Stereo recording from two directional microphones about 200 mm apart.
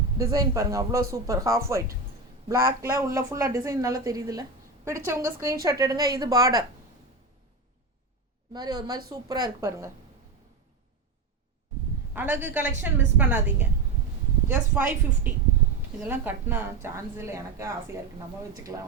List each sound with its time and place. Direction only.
0.2 s a woman's voice: 15° right (ahead or behind)
8.5 s a woman's voice: 20° right (ahead or behind)
12.1 s a woman's voice: 10° right (ahead or behind)